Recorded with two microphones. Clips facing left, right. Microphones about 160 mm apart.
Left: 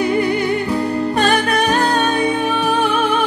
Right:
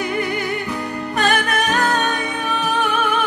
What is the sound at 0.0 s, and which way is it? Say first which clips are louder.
Music: left 6 dB; 30° left (ahead or behind).